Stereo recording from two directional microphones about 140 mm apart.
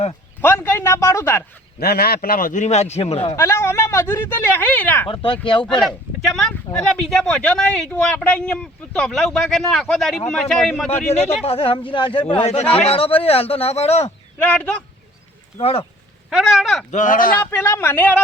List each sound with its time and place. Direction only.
0.4 s speech: 15° left (ahead or behind)
1.8 s a man's voice: 90° left; by 3.3 s 45° left (ahead or behind)
3.3 s speech: 20° left (ahead or behind)
5.0 s speech: 40° left (ahead or behind)
5.8 s speech: centre (ahead or behind)
10.8 s speech: 50° left (ahead or behind)
14.4 s speech: 10° left (ahead or behind)
15.6 s speech: 45° left (ahead or behind)
16.3 s speech: 5° right (ahead or behind)
16.9 s speech: 65° left (ahead or behind)
17.4 s speech: 15° left (ahead or behind)